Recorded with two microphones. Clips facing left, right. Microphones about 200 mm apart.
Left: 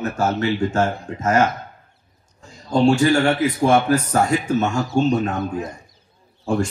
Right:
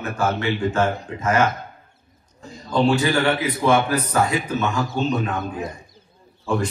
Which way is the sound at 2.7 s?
45° left (ahead or behind).